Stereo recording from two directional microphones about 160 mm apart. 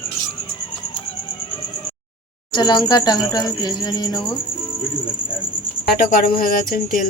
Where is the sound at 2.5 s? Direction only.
25° left (ahead or behind).